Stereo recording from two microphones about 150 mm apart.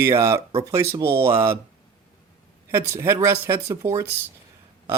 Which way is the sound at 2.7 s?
15° right (ahead or behind).